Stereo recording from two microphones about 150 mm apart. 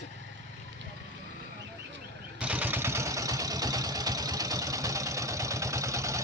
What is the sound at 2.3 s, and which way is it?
Vehicle, 10° right (ahead or behind).